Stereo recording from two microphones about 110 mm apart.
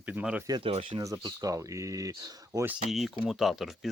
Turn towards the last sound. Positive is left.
turn(degrees=-5)  # may be behind; listen again after turning